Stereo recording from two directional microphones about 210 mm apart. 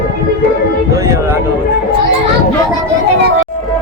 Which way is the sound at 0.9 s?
15° right (ahead or behind).